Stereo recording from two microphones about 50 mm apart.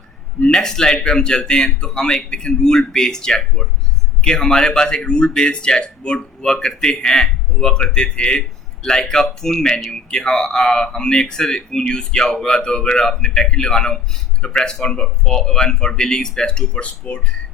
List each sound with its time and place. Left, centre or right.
0.4 s speech: centre